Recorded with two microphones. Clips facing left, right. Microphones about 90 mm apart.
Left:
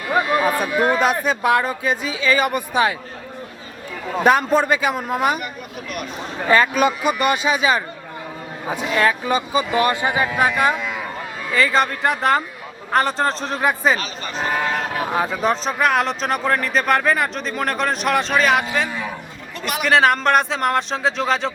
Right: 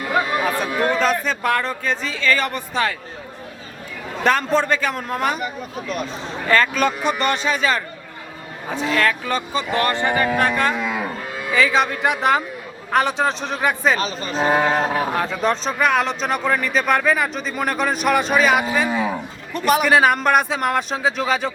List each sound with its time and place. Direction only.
0.4 s speech: 10° left (ahead or behind)
4.2 s speech: 10° left (ahead or behind)
6.5 s speech: 10° left (ahead or behind)
11.5 s a man's voice: centre (ahead or behind)
14.0 s speech: 35° right (ahead or behind)
15.1 s a man's voice: 5° left (ahead or behind)
19.5 s a man's voice: 45° right (ahead or behind)
19.8 s a man's voice: 5° right (ahead or behind)